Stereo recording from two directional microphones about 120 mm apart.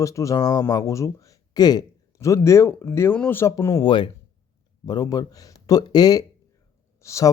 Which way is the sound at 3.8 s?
40° left (ahead or behind).